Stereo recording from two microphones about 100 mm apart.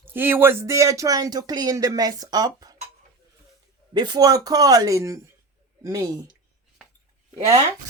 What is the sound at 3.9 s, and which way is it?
Speech, 45° right (ahead or behind).